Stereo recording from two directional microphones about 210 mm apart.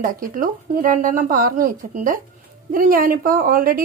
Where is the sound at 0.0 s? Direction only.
40° right (ahead or behind).